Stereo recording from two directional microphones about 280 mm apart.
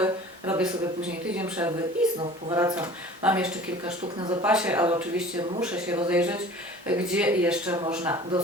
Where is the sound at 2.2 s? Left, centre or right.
Centre.